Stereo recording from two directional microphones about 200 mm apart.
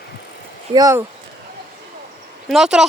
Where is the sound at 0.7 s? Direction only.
15° right (ahead or behind).